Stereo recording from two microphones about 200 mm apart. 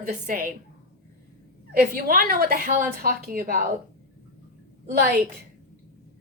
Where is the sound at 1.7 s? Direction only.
50° right (ahead or behind).